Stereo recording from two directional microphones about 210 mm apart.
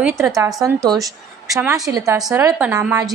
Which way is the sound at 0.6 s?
15° right (ahead or behind).